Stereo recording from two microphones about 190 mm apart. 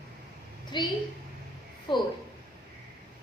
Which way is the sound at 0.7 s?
25° left (ahead or behind).